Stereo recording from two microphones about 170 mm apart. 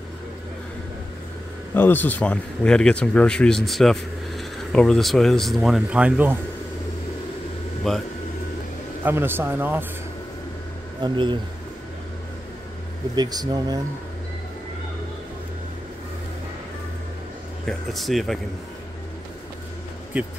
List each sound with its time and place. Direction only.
1.7 s speech: 10° left (ahead or behind); by 6.4 s 10° right (ahead or behind)
7.9 s speech: centre (ahead or behind)
9.0 s speech: 10° right (ahead or behind)
11.0 s speech: 30° right (ahead or behind)
13.1 s speech: 25° right (ahead or behind)
17.6 s speech: centre (ahead or behind)
20.1 s speech: 5° right (ahead or behind)